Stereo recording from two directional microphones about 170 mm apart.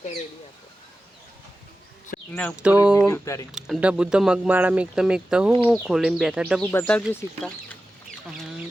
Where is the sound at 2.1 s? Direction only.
55° left (ahead or behind).